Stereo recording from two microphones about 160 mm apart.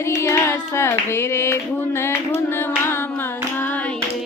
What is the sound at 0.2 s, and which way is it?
Clapping, 15° left (ahead or behind).